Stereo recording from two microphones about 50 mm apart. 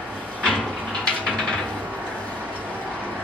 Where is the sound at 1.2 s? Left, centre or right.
Centre.